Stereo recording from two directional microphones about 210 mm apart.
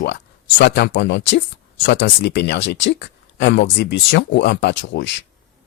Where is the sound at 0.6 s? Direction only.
55° left (ahead or behind).